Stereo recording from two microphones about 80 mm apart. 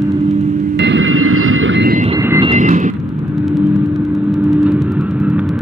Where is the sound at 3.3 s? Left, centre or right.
Centre.